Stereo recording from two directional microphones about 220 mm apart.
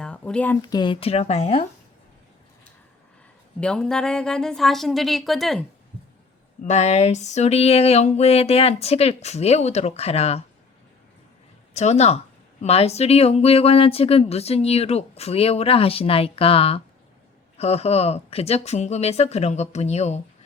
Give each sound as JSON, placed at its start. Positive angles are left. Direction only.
{"t": 0.0, "sound": "speech", "side_deg": 5}
{"t": 0.6, "sound": "speech", "side_deg": 20}
{"t": 3.6, "sound": "speech", "side_deg": 5}
{"t": 6.6, "sound": "speech", "side_deg": 30}
{"t": 11.7, "sound": "speech", "side_deg": 30}